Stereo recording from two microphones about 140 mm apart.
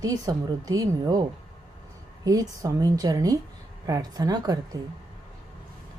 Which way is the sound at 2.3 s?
25° right (ahead or behind).